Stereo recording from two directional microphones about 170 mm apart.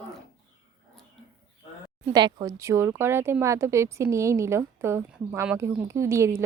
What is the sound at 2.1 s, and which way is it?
Speech, 25° right (ahead or behind).